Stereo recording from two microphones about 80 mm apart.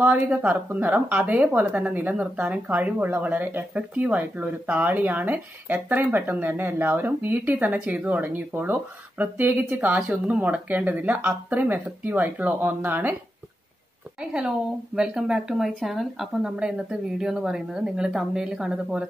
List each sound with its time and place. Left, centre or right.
0.4 s speech: right
15.0 s speech: centre